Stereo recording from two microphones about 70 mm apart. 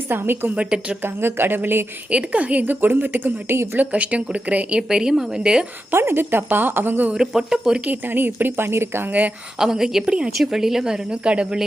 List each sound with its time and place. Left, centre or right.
0.1 s a woman's voice: right
0.5 s a woman's voice: centre
1.0 s a woman's voice: right
2.0 s a woman's voice: centre; by 3.8 s right
3.8 s a woman's voice: centre
4.8 s a woman's voice: centre
5.9 s a woman's voice: right
7.1 s a woman's voice: centre
7.9 s a woman's voice: right
9.6 s a woman's voice: centre